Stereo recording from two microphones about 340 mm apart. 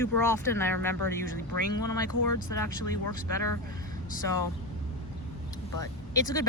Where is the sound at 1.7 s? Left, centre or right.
Left.